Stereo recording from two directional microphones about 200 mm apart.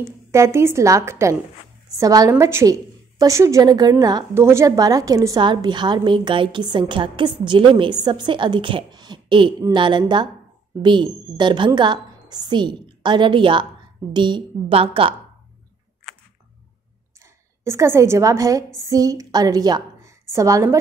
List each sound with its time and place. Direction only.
0.3 s a woman's voice: 15° right (ahead or behind)
17.2 s a woman's voice: 15° right (ahead or behind)